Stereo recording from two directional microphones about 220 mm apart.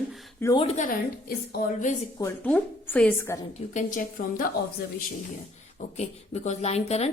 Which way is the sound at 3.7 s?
35° left (ahead or behind).